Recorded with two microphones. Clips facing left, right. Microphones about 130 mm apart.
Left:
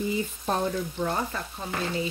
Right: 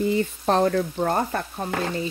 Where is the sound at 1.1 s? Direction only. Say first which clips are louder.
Right 6 dB; 55° right (ahead or behind).